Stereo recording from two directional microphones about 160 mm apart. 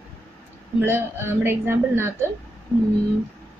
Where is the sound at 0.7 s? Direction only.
15° right (ahead or behind).